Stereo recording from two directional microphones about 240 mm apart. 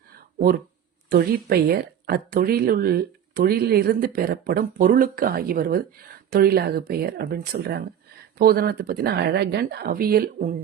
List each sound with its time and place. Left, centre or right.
1.1 s speech: right